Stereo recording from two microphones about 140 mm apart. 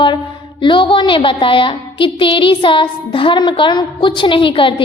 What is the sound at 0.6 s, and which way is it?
A woman's voice, 35° left (ahead or behind).